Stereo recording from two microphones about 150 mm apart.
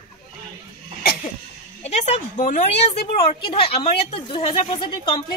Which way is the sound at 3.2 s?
40° left (ahead or behind).